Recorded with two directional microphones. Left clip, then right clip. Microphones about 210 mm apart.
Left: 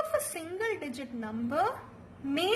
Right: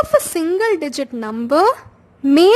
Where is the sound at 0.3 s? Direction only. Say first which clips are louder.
Right 17 dB; 55° right (ahead or behind).